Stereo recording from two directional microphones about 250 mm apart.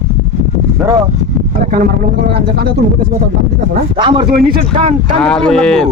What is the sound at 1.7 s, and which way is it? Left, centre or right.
Speech, right.